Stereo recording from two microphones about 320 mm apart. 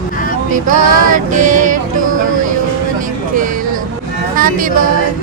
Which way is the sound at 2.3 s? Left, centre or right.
Right.